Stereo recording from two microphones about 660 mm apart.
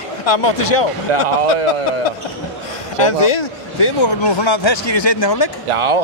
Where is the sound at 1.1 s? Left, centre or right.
Right.